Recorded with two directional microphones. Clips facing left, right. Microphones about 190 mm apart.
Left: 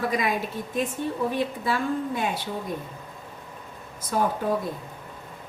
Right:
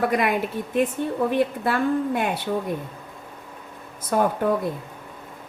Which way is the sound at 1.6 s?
60° right (ahead or behind).